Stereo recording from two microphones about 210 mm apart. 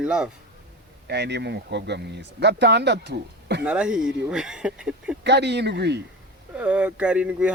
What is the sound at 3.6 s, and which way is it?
Speech, 5° right (ahead or behind).